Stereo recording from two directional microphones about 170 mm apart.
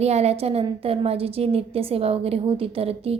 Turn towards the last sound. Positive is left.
turn(degrees=-35)  # may be behind; listen again after turning